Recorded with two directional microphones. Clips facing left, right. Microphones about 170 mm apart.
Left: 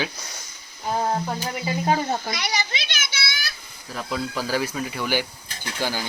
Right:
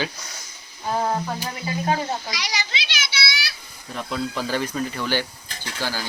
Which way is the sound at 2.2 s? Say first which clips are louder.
Left 3 dB; 55° left (ahead or behind).